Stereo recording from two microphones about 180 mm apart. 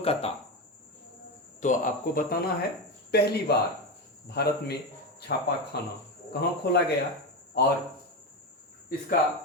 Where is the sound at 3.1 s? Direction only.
65° left (ahead or behind).